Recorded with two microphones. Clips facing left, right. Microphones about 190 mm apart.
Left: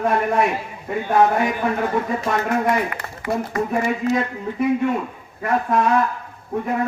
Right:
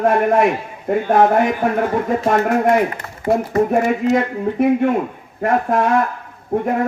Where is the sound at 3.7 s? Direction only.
50° right (ahead or behind).